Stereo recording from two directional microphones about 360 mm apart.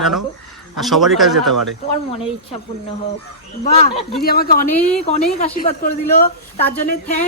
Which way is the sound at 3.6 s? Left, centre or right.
Centre.